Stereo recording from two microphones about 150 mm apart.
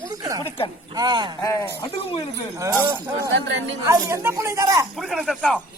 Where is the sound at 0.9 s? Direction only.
30° right (ahead or behind).